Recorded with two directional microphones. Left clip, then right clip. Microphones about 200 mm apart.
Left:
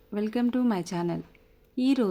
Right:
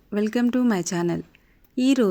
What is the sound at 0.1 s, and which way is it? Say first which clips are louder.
Speech: right 5 dB; 20° right (ahead or behind).